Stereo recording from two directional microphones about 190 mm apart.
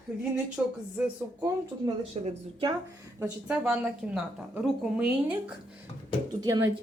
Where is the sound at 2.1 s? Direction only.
35° right (ahead or behind).